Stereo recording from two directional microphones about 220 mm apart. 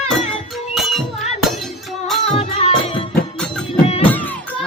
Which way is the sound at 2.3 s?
25° left (ahead or behind).